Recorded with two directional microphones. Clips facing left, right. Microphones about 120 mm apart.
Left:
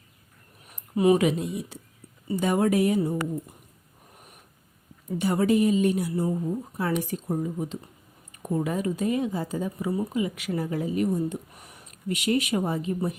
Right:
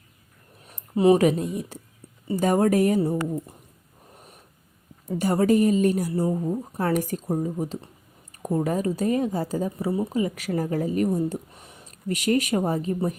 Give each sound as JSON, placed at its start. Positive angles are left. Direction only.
{"t": 0.7, "sound": "a woman's voice", "side_deg": -30}
{"t": 5.1, "sound": "a woman's voice", "side_deg": -40}
{"t": 11.5, "sound": "a sound", "side_deg": -25}
{"t": 12.0, "sound": "a woman's voice", "side_deg": -40}